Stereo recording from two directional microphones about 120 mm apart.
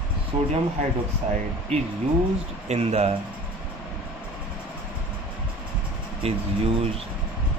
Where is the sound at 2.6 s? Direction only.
65° right (ahead or behind).